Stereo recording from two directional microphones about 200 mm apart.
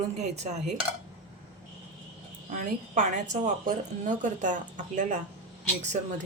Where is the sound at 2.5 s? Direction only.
35° right (ahead or behind).